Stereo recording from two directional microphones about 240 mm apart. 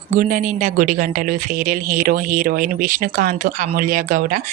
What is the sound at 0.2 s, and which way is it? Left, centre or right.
A woman's voice, right.